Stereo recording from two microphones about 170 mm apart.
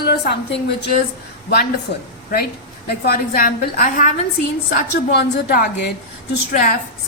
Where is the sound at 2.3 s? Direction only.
65° left (ahead or behind).